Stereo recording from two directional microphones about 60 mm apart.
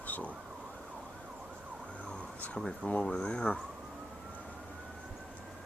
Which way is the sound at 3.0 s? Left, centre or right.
Centre.